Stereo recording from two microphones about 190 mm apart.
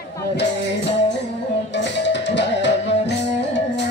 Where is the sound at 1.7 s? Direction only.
65° left (ahead or behind).